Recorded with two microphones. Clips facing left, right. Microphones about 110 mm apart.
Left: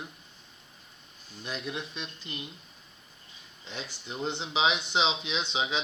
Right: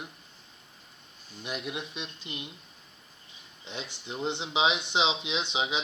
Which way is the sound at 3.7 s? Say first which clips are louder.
Right 1 dB; 20° right (ahead or behind).